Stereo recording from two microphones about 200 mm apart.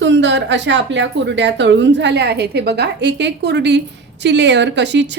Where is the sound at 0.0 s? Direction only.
65° right (ahead or behind).